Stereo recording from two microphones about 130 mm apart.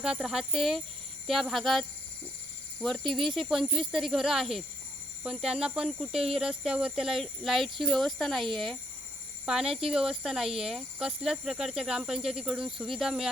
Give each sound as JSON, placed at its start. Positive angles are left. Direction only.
{"t": 0.0, "sound": "speech", "side_deg": -5}
{"t": 2.8, "sound": "speech", "side_deg": 0}